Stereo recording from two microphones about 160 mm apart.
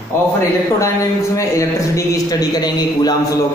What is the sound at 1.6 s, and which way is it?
A man's voice, 20° left (ahead or behind).